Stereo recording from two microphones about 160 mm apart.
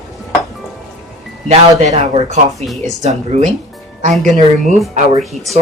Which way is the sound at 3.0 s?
45° right (ahead or behind).